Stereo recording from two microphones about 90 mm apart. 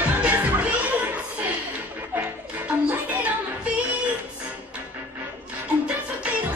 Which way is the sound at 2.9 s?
20° right (ahead or behind).